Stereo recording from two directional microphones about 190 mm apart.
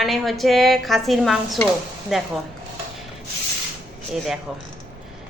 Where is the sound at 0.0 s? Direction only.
Centre (ahead or behind).